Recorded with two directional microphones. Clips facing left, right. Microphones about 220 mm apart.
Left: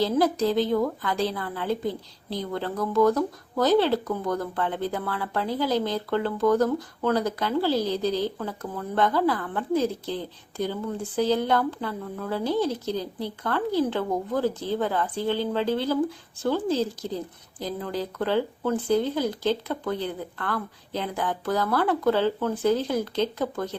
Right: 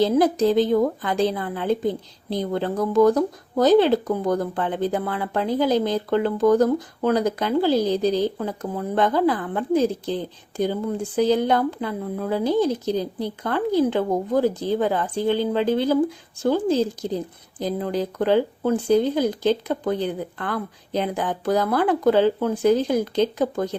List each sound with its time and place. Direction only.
0.0 s a woman's voice: 20° right (ahead or behind)